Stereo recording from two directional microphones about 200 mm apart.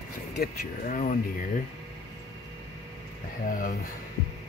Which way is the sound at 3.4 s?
40° left (ahead or behind).